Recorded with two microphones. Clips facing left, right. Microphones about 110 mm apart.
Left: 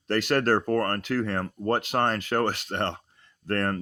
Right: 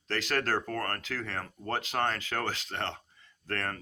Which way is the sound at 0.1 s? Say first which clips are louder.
Left 7 dB; 50° left (ahead or behind).